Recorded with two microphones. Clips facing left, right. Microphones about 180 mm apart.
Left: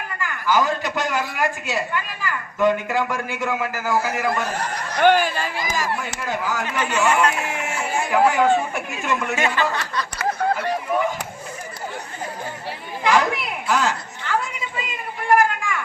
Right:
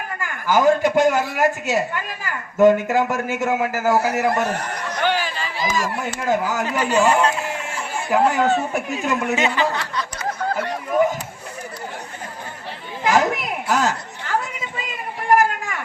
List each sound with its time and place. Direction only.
0.2 s a man's voice: 50° right (ahead or behind)
4.6 s speech: 65° left (ahead or behind)
6.2 s speech: 45° right (ahead or behind); by 7.3 s 30° right (ahead or behind)
7.5 s music: 75° left (ahead or behind)
8.4 s speech: 40° right (ahead or behind)
9.3 s speech: 15° right (ahead or behind)
13.1 s chatter: 45° right (ahead or behind)
15.3 s a sound: 40° right (ahead or behind)